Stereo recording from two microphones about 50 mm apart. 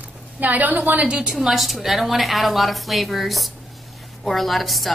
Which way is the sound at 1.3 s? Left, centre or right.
Centre.